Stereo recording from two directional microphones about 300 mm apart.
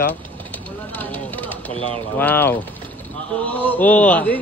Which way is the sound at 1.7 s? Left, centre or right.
Centre.